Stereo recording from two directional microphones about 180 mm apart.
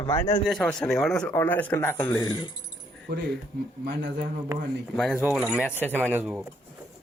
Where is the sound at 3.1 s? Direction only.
65° right (ahead or behind).